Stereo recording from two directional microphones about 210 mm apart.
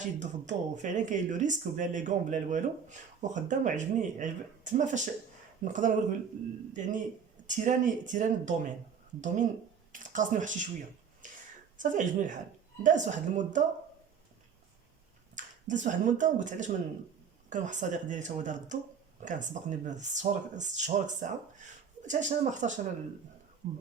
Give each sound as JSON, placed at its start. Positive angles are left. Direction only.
{"t": 0.0, "sound": "speech", "side_deg": -35}
{"t": 11.2, "sound": "whispering", "side_deg": -35}
{"t": 11.8, "sound": "speech", "side_deg": -40}
{"t": 15.4, "sound": "speech", "side_deg": -35}